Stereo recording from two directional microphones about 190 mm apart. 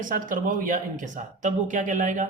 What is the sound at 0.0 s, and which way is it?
Speech, 45° right (ahead or behind).